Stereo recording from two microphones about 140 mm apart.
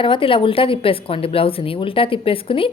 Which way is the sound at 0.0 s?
40° left (ahead or behind).